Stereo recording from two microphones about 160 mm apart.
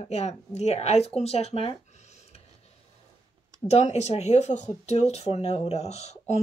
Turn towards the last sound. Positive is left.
turn(degrees=45)  # may be behind; listen again after turning